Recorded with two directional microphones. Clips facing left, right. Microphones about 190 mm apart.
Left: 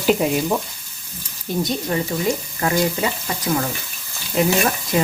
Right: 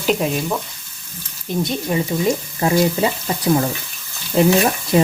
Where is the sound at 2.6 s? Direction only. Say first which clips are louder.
Right 4 dB; 25° right (ahead or behind).